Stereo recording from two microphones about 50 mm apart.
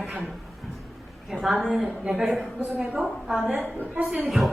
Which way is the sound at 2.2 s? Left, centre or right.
Centre.